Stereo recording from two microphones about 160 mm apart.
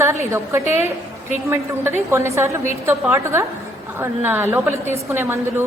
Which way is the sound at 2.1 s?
15° right (ahead or behind).